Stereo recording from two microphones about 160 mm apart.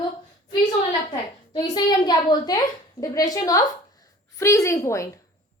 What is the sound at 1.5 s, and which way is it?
A woman's voice, 25° left (ahead or behind).